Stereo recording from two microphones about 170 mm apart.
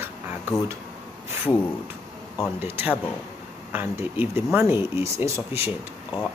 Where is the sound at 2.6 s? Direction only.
10° right (ahead or behind).